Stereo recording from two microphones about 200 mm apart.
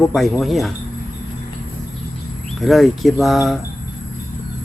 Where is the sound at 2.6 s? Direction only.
Centre (ahead or behind).